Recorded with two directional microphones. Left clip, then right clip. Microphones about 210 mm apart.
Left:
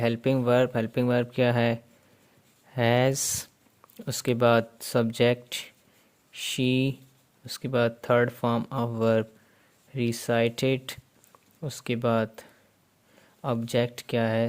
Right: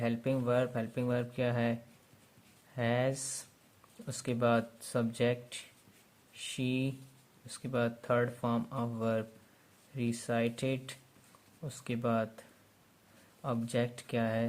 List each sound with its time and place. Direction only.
0.0 s speech: 45° left (ahead or behind)